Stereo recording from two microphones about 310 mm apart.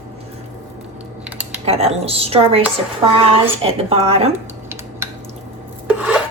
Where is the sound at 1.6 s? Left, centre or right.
Centre.